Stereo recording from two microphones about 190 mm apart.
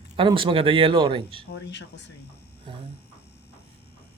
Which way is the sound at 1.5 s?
65° left (ahead or behind).